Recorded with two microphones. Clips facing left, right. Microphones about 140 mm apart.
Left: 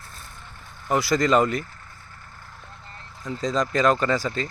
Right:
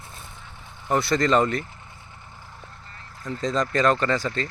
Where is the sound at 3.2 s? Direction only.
Centre (ahead or behind).